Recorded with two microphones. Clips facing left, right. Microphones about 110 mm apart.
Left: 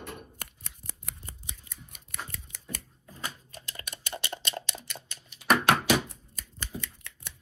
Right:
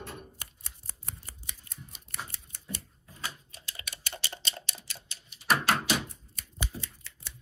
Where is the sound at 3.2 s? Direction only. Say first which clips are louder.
Left 1 dB; 45° left (ahead or behind).